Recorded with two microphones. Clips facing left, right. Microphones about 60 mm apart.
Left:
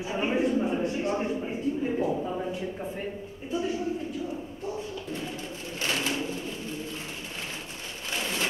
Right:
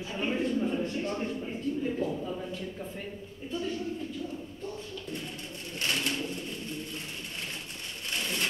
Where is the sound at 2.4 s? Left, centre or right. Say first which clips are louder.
Left 5 dB; centre.